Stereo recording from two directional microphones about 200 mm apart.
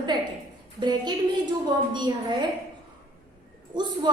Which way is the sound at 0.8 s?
20° right (ahead or behind).